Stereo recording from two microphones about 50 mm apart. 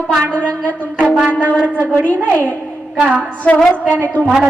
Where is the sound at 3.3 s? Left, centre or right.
Left.